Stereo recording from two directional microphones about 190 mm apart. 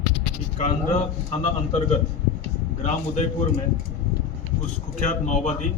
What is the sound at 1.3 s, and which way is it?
Speech, 30° left (ahead or behind).